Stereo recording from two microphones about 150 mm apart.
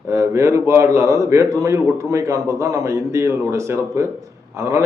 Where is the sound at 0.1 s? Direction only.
20° right (ahead or behind).